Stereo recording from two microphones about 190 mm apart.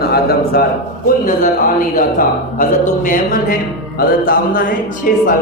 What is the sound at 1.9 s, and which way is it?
Speech, 45° left (ahead or behind).